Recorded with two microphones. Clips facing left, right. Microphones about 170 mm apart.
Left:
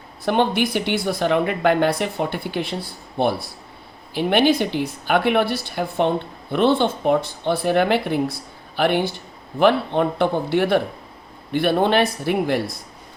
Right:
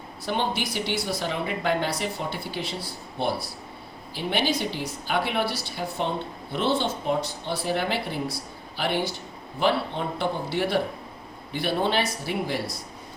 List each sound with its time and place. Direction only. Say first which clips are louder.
0.3 s speech: left 8 dB; 60° left (ahead or behind)